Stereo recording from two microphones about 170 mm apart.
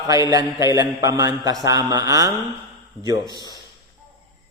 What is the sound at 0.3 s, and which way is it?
A man's voice, 20° right (ahead or behind).